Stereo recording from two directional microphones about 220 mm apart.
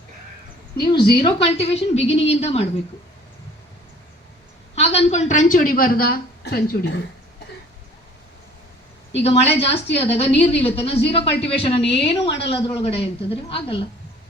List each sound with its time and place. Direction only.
0.8 s a woman's voice: 20° left (ahead or behind)
4.7 s a woman's voice: 30° left (ahead or behind); by 7.0 s 45° left (ahead or behind)
9.1 s a woman's voice: 30° left (ahead or behind)